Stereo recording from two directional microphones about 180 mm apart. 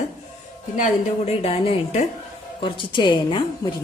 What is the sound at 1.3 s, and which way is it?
A woman's voice, 35° left (ahead or behind).